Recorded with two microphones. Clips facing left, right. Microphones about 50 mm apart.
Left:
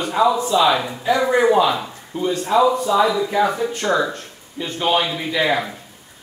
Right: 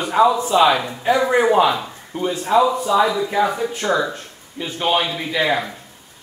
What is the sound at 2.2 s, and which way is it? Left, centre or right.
Speech, centre.